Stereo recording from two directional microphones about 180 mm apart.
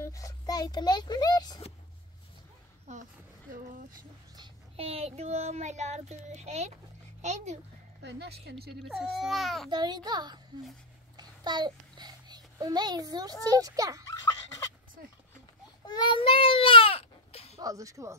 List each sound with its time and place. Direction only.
0.0 s a child's voice: 20° left (ahead or behind)
2.9 s speech: 40° right (ahead or behind)
4.4 s child singing: 30° right (ahead or behind)
7.2 s a child's voice: 40° right (ahead or behind)
8.0 s speech: 70° right (ahead or behind)
9.1 s speech: centre (ahead or behind)
9.7 s a child's voice: 25° right (ahead or behind)
15.8 s baby cry: 25° left (ahead or behind)
17.6 s a child's voice: 20° right (ahead or behind)